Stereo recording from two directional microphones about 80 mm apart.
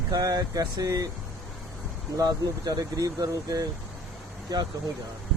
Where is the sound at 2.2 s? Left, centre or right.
Right.